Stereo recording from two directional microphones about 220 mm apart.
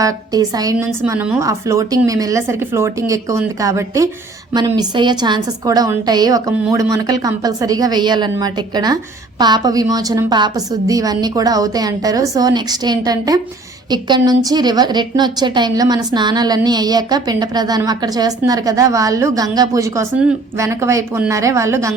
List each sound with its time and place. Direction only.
0.0 s a woman's voice: 15° right (ahead or behind)